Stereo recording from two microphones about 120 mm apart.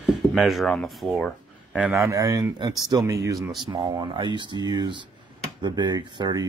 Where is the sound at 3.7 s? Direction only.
40° right (ahead or behind).